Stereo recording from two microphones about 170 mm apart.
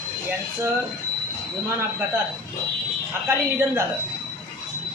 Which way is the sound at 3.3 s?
15° right (ahead or behind).